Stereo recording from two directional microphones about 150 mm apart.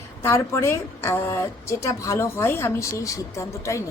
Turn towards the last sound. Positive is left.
turn(degrees=20)  # may be behind; listen again after turning